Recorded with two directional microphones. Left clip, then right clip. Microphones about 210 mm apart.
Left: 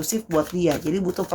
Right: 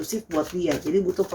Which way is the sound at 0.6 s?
45° left (ahead or behind).